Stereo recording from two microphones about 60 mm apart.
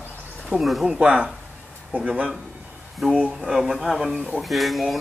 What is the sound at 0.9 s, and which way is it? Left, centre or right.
Speech, centre.